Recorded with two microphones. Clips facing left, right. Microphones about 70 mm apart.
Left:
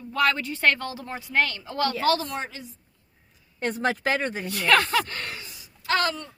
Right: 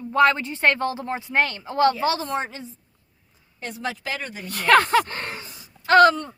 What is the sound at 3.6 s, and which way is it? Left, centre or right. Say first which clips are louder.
Speech: left 5 dB; left.